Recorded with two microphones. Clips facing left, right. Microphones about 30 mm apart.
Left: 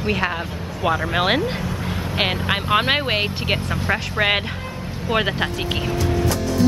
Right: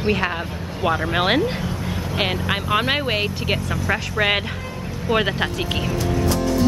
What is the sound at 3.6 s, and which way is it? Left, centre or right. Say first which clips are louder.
Speech: even; left.